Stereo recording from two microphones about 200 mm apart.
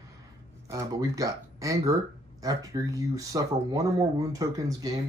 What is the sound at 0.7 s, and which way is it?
Speech, 15° right (ahead or behind).